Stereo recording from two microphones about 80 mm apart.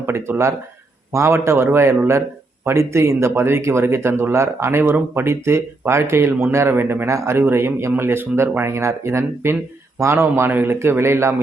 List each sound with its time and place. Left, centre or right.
0.0 s speech: right